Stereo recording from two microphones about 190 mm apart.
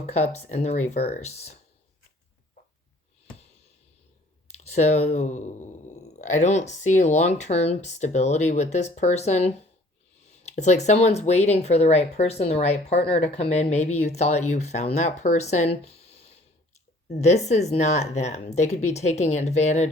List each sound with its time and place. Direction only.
0.1 s speech: 35° left (ahead or behind)
4.6 s speech: 35° left (ahead or behind)
15.8 s a sound: 35° left (ahead or behind)
17.1 s speech: 35° left (ahead or behind)